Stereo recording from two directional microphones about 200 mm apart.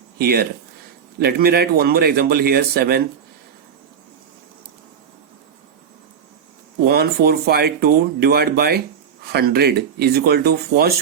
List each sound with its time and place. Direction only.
0.2 s speech: 50° right (ahead or behind)
6.8 s speech: 50° right (ahead or behind)